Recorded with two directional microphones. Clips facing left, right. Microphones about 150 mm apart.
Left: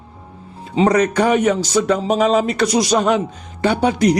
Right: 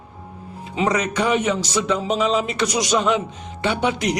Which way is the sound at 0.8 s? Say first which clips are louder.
Left 5 dB; 50° left (ahead or behind).